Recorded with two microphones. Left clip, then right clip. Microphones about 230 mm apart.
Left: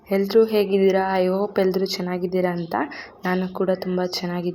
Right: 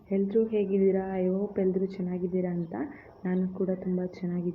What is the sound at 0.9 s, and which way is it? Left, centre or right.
Speech, centre.